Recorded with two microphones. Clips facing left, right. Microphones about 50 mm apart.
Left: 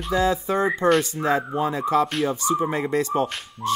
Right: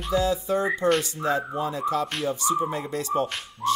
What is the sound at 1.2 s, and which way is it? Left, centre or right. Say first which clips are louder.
Speech: left 3 dB; left.